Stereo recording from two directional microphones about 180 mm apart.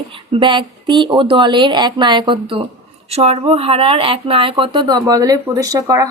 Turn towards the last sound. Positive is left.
turn(degrees=-20)  # may be behind; listen again after turning